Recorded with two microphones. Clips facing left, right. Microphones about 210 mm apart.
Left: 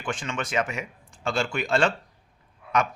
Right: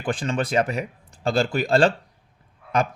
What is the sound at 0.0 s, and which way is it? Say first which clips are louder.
Speech: right 6 dB; 35° right (ahead or behind).